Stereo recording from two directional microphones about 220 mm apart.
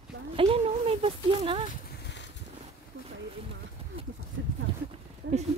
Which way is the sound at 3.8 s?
25° right (ahead or behind).